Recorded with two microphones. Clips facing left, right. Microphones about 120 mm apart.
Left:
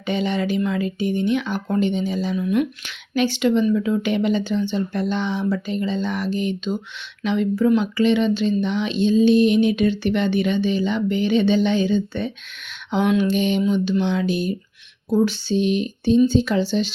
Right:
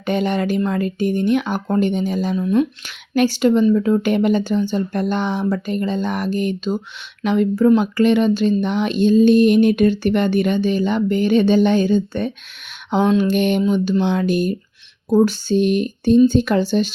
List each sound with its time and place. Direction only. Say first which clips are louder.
0.0 s speech: right 3 dB; 50° right (ahead or behind)
2.3 s speech: right 4 dB; 35° right (ahead or behind)
13.3 s speech: right 3 dB; 55° right (ahead or behind)